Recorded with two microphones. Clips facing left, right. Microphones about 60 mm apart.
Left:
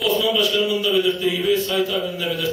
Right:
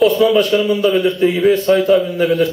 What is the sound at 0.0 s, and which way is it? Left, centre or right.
A man's voice, right.